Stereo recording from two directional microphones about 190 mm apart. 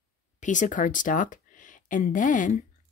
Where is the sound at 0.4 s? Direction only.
40° left (ahead or behind).